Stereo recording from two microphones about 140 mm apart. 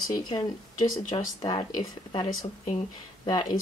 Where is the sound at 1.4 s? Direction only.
35° left (ahead or behind).